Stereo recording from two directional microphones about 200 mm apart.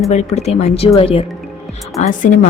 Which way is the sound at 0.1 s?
35° left (ahead or behind).